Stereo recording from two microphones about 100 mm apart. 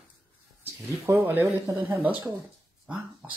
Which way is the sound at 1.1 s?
25° right (ahead or behind).